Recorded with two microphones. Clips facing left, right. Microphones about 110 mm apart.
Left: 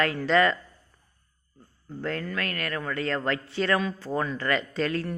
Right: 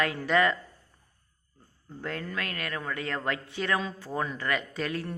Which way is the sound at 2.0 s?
20° right (ahead or behind).